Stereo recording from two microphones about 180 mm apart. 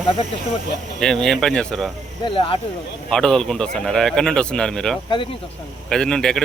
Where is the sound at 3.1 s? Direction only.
5° left (ahead or behind).